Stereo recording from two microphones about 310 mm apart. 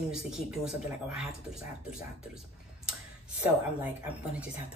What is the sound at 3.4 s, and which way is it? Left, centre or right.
Speech, centre.